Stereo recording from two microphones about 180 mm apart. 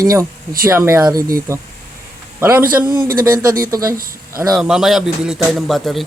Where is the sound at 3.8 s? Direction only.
55° right (ahead or behind).